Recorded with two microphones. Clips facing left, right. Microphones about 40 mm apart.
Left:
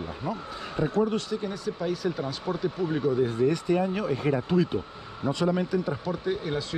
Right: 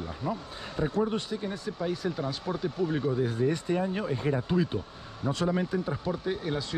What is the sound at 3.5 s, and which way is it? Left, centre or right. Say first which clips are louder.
A man's voice: left 3 dB; left.